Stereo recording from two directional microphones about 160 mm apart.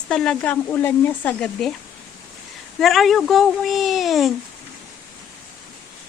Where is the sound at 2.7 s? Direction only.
Centre (ahead or behind).